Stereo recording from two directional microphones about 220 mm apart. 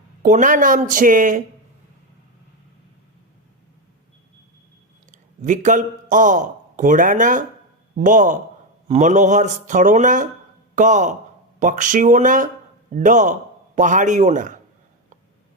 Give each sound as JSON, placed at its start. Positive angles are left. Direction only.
{"t": 0.2, "sound": "speech", "side_deg": -35}
{"t": 5.1, "sound": "a man's voice", "side_deg": -35}